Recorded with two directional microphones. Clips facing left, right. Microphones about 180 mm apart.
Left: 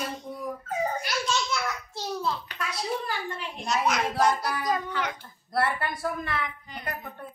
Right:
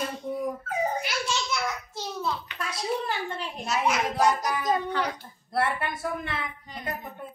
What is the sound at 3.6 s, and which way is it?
A woman's voice, 5° right (ahead or behind).